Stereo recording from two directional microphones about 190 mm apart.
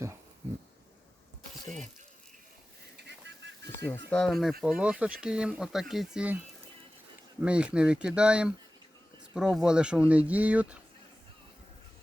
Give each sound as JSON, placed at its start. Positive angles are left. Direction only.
{"t": 3.0, "sound": "a sound", "side_deg": -65}
{"t": 3.9, "sound": "speech", "side_deg": 5}
{"t": 7.4, "sound": "speech", "side_deg": -5}